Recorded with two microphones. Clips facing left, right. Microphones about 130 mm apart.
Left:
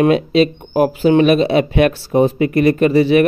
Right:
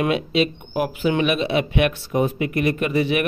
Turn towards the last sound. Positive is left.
turn(degrees=35)  # may be behind; listen again after turning